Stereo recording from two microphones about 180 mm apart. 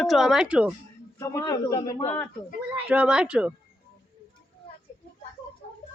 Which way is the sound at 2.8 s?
5° right (ahead or behind).